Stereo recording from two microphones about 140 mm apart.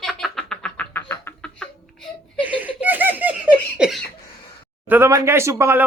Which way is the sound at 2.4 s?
10° right (ahead or behind).